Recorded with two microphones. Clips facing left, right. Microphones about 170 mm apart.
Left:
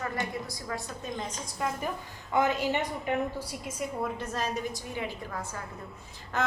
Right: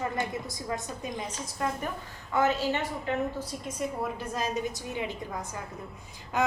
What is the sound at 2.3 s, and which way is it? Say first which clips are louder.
A woman's voice: even; 15° left (ahead or behind).